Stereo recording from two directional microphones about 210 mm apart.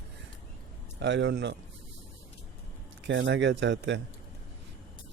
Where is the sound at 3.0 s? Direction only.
60° right (ahead or behind).